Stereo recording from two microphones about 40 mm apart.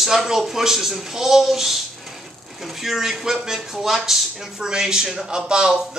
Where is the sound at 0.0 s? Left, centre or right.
Centre.